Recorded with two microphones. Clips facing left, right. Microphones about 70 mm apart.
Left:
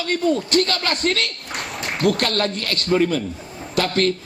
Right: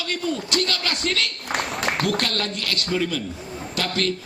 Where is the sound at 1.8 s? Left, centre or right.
Right.